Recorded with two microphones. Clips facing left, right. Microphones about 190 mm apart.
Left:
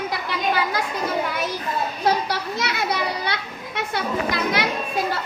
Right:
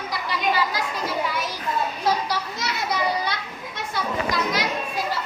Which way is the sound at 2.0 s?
60° left (ahead or behind).